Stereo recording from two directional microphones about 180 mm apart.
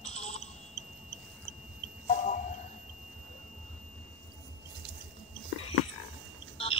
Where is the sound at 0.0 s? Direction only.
35° left (ahead or behind).